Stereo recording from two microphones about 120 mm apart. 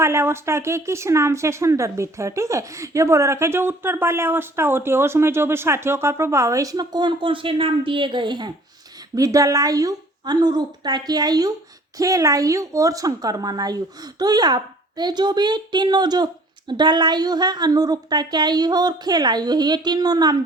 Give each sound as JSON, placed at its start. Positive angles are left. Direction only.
{"t": 0.0, "sound": "speech", "side_deg": -20}
{"t": 9.1, "sound": "a woman's voice", "side_deg": -30}